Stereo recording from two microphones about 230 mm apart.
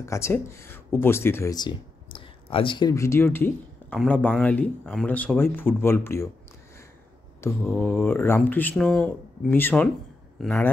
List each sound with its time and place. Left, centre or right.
0.0 s speech: centre
7.4 s a man's voice: centre